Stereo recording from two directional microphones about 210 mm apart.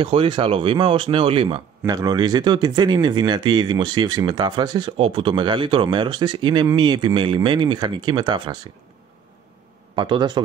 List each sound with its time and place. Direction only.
0.0 s a man's voice: 25° right (ahead or behind)
9.9 s a man's voice: 20° right (ahead or behind)